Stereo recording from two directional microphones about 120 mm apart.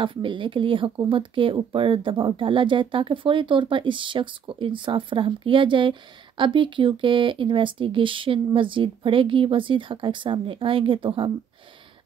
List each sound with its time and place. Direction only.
0.0 s speech: 45° right (ahead or behind)